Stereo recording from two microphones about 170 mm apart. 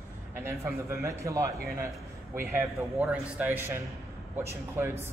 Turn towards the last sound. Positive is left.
turn(degrees=-15)  # may be behind; listen again after turning